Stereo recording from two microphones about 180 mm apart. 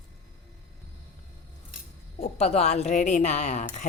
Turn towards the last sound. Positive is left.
turn(degrees=40)  # may be behind; listen again after turning